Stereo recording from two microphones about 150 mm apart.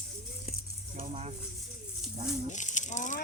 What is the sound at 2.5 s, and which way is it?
Speech, 55° left (ahead or behind).